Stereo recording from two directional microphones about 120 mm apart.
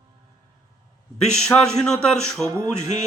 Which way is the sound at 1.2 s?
5° left (ahead or behind).